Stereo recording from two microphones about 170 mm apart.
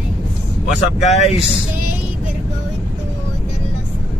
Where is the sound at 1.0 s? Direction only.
40° left (ahead or behind).